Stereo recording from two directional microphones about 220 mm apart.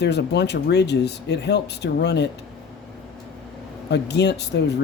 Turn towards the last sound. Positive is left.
turn(degrees=50)  # may be behind; listen again after turning